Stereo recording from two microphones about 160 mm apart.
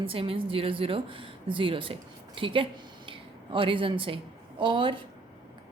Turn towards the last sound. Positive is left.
turn(degrees=-30)  # may be behind; listen again after turning